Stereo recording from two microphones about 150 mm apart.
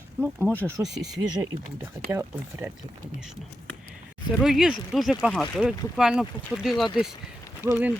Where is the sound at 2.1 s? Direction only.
15° right (ahead or behind).